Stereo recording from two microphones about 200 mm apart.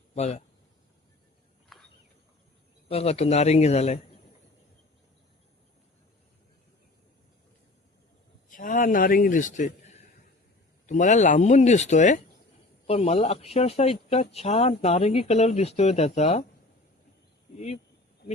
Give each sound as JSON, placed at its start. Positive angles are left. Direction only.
{"t": 0.1, "sound": "speech", "side_deg": 35}
{"t": 1.7, "sound": "a sound", "side_deg": 0}
{"t": 2.9, "sound": "speech", "side_deg": 30}
{"t": 8.4, "sound": "a man's voice", "side_deg": 40}